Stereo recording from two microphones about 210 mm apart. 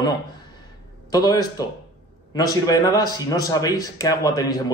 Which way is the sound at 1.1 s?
15° left (ahead or behind).